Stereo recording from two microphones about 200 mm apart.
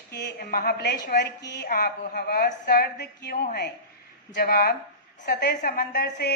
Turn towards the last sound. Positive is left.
turn(degrees=55)  # may be behind; listen again after turning